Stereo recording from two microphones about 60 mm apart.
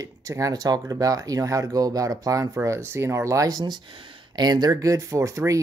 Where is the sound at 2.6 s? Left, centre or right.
Right.